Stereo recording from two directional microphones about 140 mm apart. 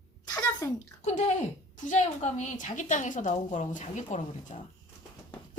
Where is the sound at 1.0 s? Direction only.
55° left (ahead or behind).